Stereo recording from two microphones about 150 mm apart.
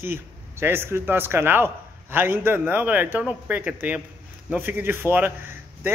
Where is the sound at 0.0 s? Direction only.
15° right (ahead or behind).